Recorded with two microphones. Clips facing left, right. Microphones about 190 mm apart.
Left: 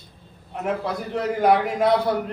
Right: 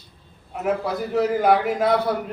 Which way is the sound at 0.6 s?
5° right (ahead or behind).